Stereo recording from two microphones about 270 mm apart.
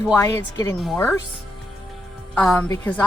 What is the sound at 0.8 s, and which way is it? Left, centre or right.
Speech, centre.